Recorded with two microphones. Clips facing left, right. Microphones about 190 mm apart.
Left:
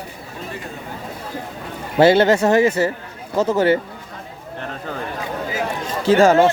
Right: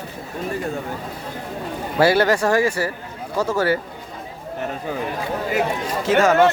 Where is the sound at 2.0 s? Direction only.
25° left (ahead or behind).